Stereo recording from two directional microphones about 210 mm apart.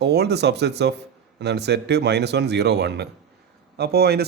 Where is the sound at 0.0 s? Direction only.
50° right (ahead or behind).